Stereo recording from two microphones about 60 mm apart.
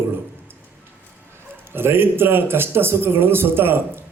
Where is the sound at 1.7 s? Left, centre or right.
Right.